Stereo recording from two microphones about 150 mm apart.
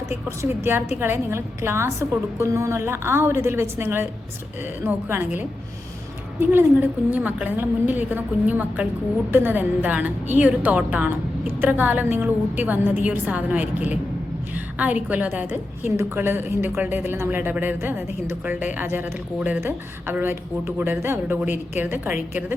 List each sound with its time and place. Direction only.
0.1 s a woman's voice: 15° right (ahead or behind)